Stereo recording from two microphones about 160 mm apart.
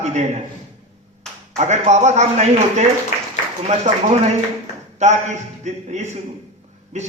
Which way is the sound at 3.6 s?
45° right (ahead or behind).